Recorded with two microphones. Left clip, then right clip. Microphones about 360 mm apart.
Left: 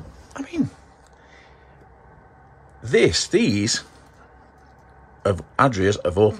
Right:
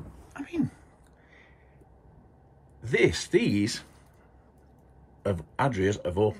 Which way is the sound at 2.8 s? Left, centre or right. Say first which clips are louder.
Left 7 dB; centre.